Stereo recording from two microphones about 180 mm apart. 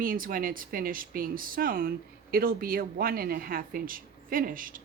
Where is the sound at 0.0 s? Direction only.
50° right (ahead or behind).